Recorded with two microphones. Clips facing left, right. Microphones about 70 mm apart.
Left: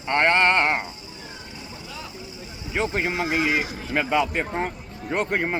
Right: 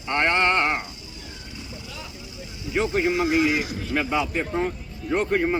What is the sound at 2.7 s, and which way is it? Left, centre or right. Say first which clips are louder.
A man's voice: right 3 dB; left.